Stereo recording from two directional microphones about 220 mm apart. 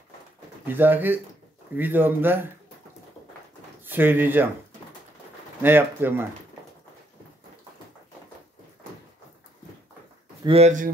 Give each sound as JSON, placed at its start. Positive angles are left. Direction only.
{"t": 0.7, "sound": "speech", "side_deg": -10}
{"t": 3.8, "sound": "speech", "side_deg": -10}
{"t": 5.6, "sound": "speech", "side_deg": -10}
{"t": 10.4, "sound": "speech", "side_deg": -25}